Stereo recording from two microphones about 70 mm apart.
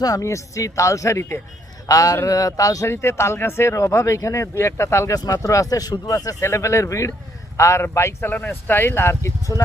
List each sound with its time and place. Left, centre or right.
0.0 s speech: left
1.9 s speech: left
2.9 s speech: left
5.1 s speech: left
6.4 s speech: left
8.3 s speech: left